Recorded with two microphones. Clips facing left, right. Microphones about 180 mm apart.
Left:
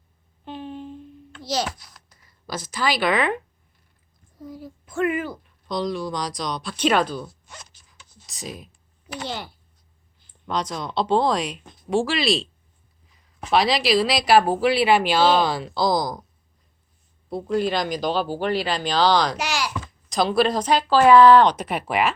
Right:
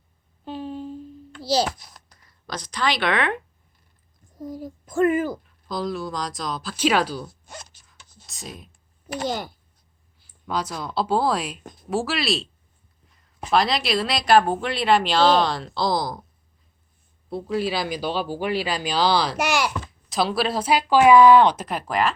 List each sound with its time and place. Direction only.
0.4 s a sound: 35° right (ahead or behind)
1.4 s a child's voice: 30° right (ahead or behind)
2.5 s speech: 5° left (ahead or behind)
4.4 s a child's voice: 40° right (ahead or behind)
5.6 s speech: centre (ahead or behind)
7.4 s zipper: 40° right (ahead or behind)
7.9 s clicking: centre (ahead or behind)
9.1 s a child's voice: 45° right (ahead or behind)
10.2 s speech: 5° right (ahead or behind)
13.1 s a sound: centre (ahead or behind)
13.5 s speech: centre (ahead or behind)
17.2 s speech: centre (ahead or behind)
19.4 s a child's voice: 55° right (ahead or behind)
20.1 s speech: 5° right (ahead or behind)